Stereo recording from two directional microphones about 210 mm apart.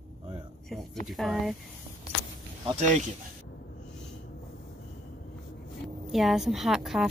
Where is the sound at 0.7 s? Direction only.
Centre (ahead or behind).